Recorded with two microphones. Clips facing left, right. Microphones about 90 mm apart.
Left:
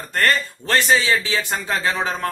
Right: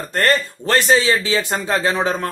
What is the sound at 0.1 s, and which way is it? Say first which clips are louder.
A man's voice: right 2 dB; 40° right (ahead or behind).